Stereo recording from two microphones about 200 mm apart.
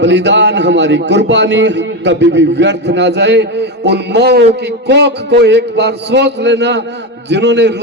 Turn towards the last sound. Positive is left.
turn(degrees=-60)  # may be behind; listen again after turning